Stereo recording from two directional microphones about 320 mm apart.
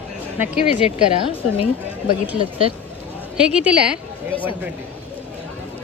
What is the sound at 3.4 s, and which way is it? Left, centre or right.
Speech, centre.